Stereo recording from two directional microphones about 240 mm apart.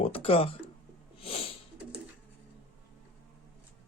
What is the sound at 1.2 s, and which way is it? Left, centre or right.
Sneeze, left.